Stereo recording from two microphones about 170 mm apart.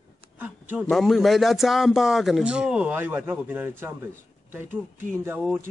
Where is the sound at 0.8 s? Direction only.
Centre (ahead or behind).